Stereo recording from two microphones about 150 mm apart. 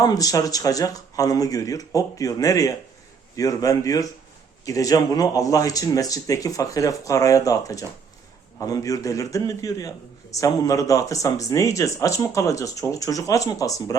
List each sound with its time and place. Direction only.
0.0 s speech: 25° left (ahead or behind)